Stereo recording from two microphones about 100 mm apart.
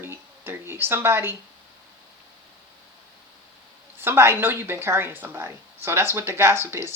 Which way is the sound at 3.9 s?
25° right (ahead or behind).